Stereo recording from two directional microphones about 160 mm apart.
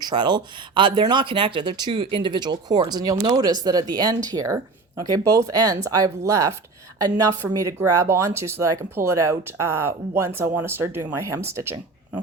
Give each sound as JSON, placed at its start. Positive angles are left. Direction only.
{"t": 0.0, "sound": "speech", "side_deg": -25}